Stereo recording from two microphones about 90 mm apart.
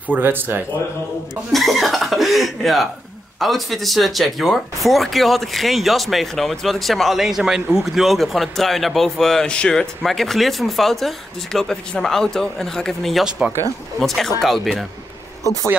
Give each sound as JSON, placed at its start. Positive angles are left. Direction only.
{"t": 0.1, "sound": "speech", "side_deg": -25}
{"t": 1.3, "sound": "speech", "side_deg": 0}